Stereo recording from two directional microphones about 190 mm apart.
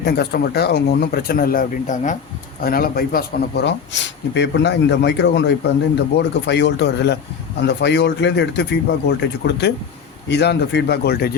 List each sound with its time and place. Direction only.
0.0 s a man's voice: 60° left (ahead or behind)